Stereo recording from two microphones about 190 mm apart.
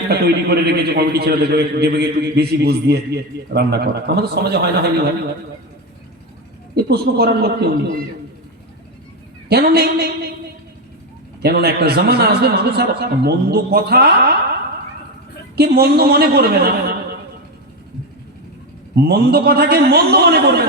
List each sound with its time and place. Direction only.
0.1 s a man's voice: 55° right (ahead or behind)
6.7 s a man's voice: 55° right (ahead or behind)
9.5 s a man's voice: 55° right (ahead or behind)
11.4 s a man's voice: 55° right (ahead or behind)
15.5 s a man's voice: 55° right (ahead or behind)
18.9 s a man's voice: 60° right (ahead or behind)